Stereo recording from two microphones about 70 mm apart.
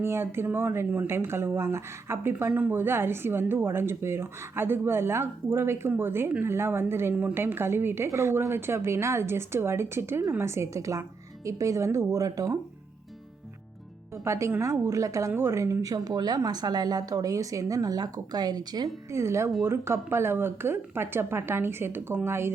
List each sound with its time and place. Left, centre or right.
0.0 s a woman's voice: right
14.3 s a woman's voice: right
19.1 s a woman's voice: right